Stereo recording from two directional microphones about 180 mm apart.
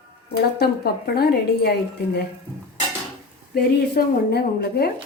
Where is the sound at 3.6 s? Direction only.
65° left (ahead or behind).